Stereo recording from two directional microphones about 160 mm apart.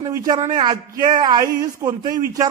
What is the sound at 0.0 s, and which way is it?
A man's voice, 25° right (ahead or behind).